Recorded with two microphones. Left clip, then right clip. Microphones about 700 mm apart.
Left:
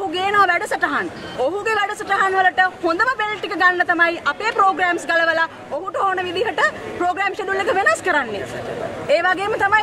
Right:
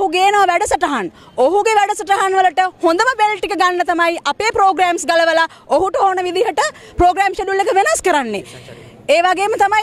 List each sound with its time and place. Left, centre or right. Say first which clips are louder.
0.1 s a woman's voice: even; right